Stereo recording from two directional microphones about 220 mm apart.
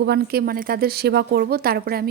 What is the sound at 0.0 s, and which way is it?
A woman's voice, 45° right (ahead or behind).